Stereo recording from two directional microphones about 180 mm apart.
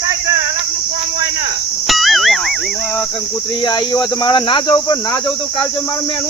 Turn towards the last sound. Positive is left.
turn(degrees=25)  # may be behind; listen again after turning